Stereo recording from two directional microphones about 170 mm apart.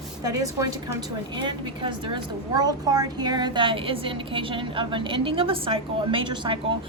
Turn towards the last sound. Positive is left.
turn(degrees=-30)  # may be behind; listen again after turning